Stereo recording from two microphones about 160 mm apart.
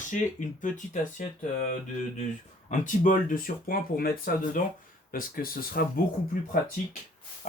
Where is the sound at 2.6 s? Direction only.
50° left (ahead or behind).